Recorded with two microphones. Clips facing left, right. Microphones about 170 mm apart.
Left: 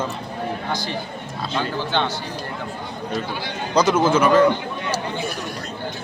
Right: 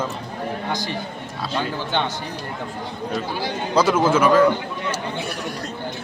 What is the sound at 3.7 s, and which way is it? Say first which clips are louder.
Speech: left 1 dB; 5° right (ahead or behind).